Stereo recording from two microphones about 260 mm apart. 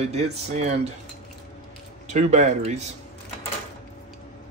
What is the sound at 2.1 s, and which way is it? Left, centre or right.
Speech, right.